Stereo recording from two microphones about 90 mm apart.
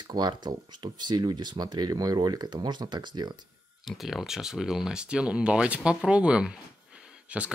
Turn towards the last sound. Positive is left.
turn(degrees=-15)  # may be behind; listen again after turning